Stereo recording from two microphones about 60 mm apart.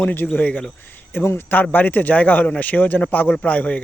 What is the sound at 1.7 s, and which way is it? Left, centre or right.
Speech, left.